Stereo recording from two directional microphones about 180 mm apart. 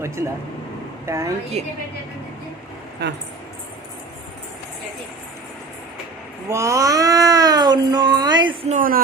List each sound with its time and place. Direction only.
0.2 s a woman's voice: 15° right (ahead or behind)
1.6 s a woman's voice: 35° right (ahead or behind)
6.5 s speech: 20° right (ahead or behind)
8.7 s speech: 50° right (ahead or behind)